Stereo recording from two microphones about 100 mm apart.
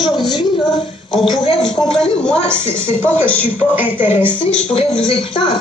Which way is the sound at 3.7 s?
20° right (ahead or behind).